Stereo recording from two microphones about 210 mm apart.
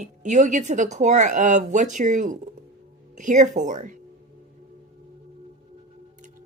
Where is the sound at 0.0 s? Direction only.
35° right (ahead or behind).